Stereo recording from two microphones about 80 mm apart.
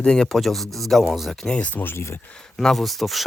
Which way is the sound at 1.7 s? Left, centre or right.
Left.